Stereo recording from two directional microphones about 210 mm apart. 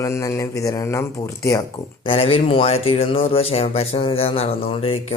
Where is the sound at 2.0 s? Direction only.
25° left (ahead or behind).